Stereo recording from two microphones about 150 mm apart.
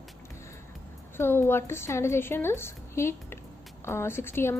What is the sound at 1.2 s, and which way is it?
A woman's voice, 15° left (ahead or behind).